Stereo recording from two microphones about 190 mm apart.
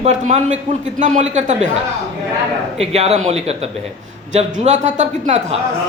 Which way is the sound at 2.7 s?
35° right (ahead or behind).